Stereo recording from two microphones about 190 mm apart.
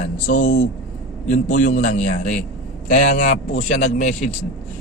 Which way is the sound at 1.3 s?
40° left (ahead or behind).